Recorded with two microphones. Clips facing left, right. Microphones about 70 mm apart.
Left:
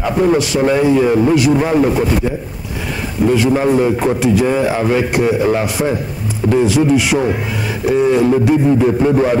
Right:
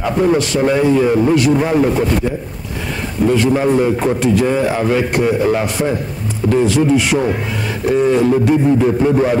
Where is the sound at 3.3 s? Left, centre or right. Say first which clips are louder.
Left 1 dB; centre.